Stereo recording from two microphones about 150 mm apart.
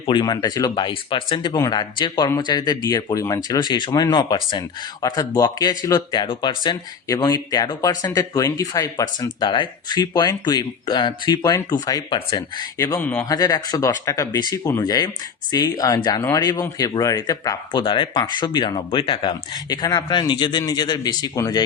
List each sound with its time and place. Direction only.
0.0 s speech: 30° left (ahead or behind)
13.0 s speech: 10° left (ahead or behind)
13.2 s speech: 25° left (ahead or behind)